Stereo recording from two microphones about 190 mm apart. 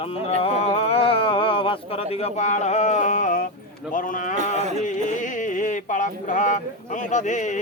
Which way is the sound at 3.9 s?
45° left (ahead or behind).